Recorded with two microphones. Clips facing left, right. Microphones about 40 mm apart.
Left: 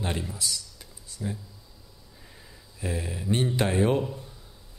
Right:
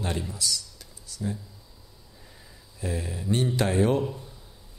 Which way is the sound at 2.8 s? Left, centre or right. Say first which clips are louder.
Even; centre.